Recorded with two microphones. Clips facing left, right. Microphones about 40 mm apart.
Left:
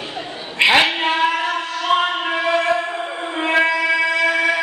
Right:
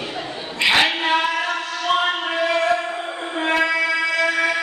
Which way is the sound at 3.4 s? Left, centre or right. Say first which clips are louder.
Left 2 dB; left.